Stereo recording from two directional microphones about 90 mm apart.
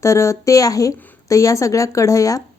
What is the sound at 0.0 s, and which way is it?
A woman's voice, 35° left (ahead or behind).